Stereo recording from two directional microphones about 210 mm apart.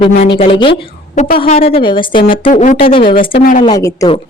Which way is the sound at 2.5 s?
35° left (ahead or behind).